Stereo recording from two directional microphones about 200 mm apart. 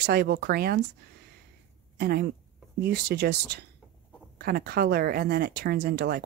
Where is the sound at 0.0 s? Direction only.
55° right (ahead or behind).